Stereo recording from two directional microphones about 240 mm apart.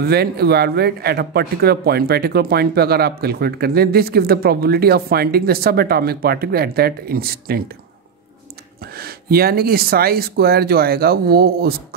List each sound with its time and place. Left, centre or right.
0.0 s a man's voice: right
8.8 s a man's voice: right